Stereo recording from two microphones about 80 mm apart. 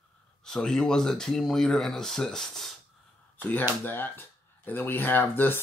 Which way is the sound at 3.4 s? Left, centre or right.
Left.